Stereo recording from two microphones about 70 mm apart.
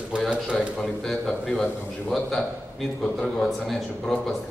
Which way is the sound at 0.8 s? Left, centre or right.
Centre.